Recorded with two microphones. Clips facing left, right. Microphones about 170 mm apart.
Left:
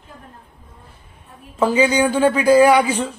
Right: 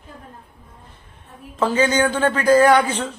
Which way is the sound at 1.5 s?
10° left (ahead or behind).